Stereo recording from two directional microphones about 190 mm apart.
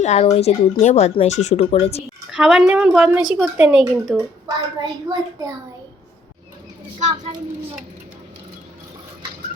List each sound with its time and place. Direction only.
0.0 s speech: 35° left (ahead or behind)
2.3 s a woman's voice: 5° right (ahead or behind)
4.4 s a child's voice: 20° right (ahead or behind)